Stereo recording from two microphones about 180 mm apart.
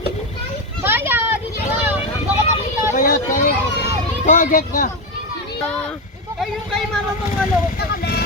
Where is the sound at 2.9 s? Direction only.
50° left (ahead or behind).